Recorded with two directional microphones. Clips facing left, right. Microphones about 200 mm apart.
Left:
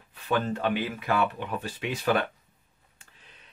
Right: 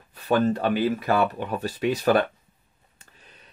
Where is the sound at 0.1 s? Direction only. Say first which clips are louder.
Right 6 dB; 40° right (ahead or behind).